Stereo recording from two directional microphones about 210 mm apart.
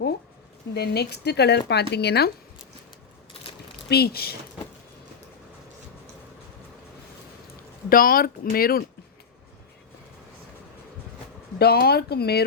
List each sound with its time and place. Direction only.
0.7 s speech: 50° left (ahead or behind)
3.8 s speech: 50° left (ahead or behind)
7.9 s speech: 45° left (ahead or behind)
11.6 s speech: 50° left (ahead or behind)